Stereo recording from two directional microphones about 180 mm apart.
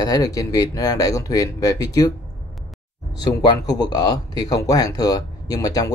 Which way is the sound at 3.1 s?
20° left (ahead or behind).